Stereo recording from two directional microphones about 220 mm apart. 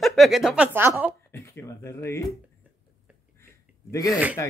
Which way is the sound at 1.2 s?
10° left (ahead or behind).